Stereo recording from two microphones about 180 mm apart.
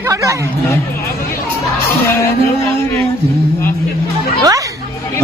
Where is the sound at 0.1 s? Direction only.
15° right (ahead or behind).